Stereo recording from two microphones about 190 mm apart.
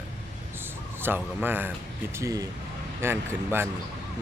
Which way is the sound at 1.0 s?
10° right (ahead or behind).